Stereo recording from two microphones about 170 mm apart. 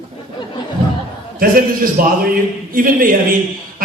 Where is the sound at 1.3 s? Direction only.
55° right (ahead or behind).